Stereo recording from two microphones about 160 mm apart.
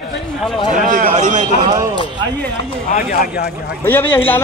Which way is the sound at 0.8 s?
55° right (ahead or behind).